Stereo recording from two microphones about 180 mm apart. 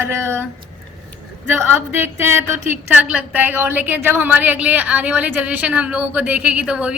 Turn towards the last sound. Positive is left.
turn(degrees=-5)  # may be behind; listen again after turning